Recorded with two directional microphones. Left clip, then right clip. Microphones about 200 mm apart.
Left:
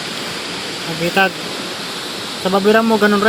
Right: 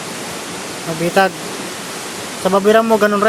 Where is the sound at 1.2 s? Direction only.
35° right (ahead or behind).